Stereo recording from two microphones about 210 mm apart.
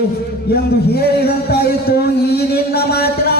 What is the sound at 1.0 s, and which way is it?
A man's voice, 50° left (ahead or behind).